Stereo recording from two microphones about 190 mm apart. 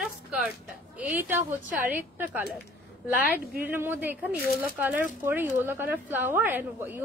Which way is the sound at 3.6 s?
10° right (ahead or behind).